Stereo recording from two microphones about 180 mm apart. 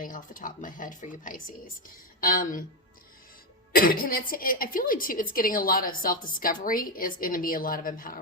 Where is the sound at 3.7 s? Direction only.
55° left (ahead or behind).